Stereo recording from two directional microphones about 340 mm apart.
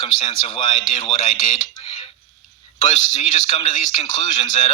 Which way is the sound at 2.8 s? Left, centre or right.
Centre.